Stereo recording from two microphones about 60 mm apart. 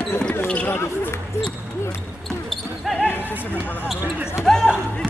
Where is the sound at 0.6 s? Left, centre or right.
Left.